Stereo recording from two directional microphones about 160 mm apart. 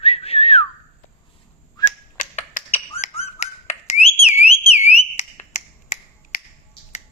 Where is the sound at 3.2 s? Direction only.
40° left (ahead or behind).